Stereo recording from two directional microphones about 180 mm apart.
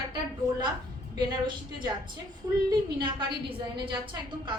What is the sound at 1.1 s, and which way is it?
A woman's voice, 25° right (ahead or behind).